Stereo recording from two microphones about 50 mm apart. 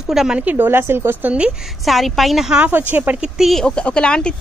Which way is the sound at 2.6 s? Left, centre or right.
Right.